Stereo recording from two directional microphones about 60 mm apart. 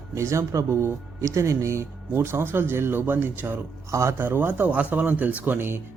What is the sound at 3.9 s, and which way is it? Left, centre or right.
Speech, right.